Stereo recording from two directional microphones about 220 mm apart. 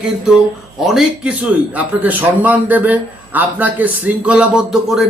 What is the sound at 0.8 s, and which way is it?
A man's voice, centre (ahead or behind).